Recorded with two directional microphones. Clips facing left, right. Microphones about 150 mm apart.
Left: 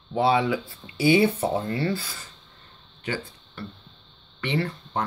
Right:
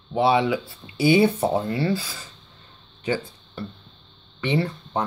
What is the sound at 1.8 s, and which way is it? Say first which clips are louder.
Speech: right 3 dB; 10° right (ahead or behind).